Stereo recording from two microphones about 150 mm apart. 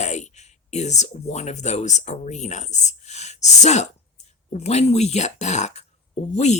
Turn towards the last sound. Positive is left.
turn(degrees=50)  # may be behind; listen again after turning